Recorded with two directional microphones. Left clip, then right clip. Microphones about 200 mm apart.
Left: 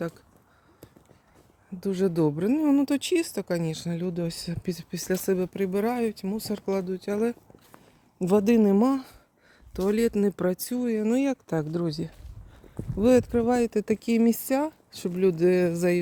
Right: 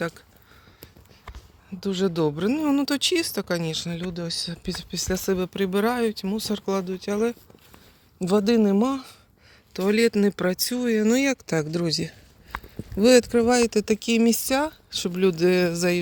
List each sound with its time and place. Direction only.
1.8 s speech: 15° left (ahead or behind)
3.9 s speech: 30° left (ahead or behind)
9.7 s speech: 5° left (ahead or behind)